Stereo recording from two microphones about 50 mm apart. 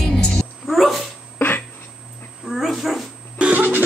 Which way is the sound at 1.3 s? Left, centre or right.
Left.